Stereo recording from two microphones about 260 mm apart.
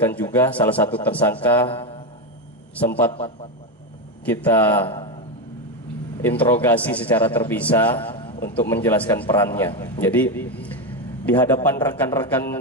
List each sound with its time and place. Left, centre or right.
0.0 s a man's voice: centre
1.7 s a man's voice: left
2.8 s a man's voice: centre
4.3 s a man's voice: centre
6.2 s a man's voice: centre
8.1 s a sound: centre
8.5 s a man's voice: centre